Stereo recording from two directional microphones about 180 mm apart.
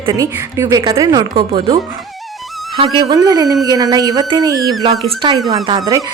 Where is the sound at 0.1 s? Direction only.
15° right (ahead or behind).